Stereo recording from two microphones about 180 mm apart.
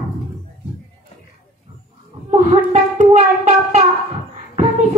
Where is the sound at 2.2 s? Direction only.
40° right (ahead or behind).